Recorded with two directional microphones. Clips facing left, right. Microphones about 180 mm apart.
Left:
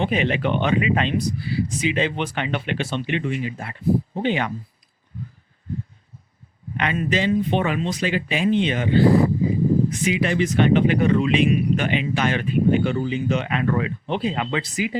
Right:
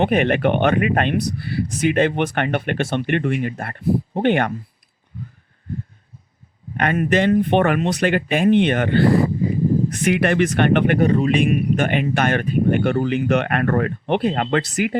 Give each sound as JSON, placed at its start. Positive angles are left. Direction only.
{"t": 0.0, "sound": "speech", "side_deg": -60}
{"t": 6.7, "sound": "speech", "side_deg": -55}
{"t": 11.0, "sound": "speech", "side_deg": -40}